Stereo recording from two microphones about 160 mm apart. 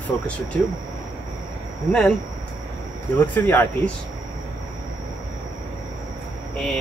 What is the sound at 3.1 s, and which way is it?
Speech, 10° left (ahead or behind).